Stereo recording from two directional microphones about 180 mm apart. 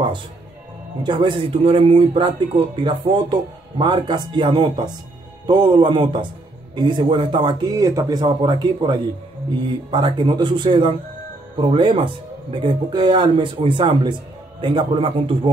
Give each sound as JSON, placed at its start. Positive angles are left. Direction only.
{"t": 1.0, "sound": "speech", "side_deg": -25}